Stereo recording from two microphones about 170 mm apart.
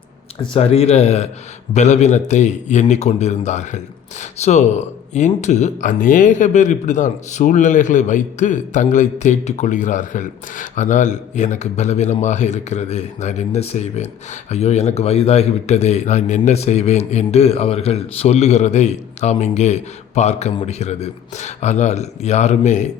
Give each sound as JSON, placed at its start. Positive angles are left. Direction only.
{"t": 0.3, "sound": "a man's voice", "side_deg": 35}